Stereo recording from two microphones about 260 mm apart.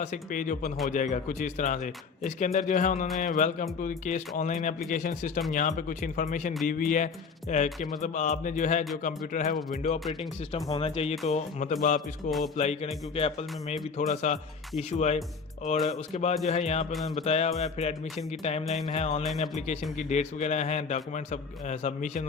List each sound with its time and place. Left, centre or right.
0.0 s a man's voice: left
18.6 s music: centre
18.9 s a man's voice: left